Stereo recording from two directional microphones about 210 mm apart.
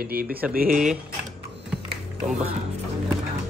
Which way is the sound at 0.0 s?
45° right (ahead or behind).